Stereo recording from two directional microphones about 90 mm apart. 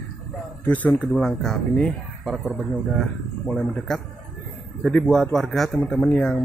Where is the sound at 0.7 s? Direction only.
15° left (ahead or behind).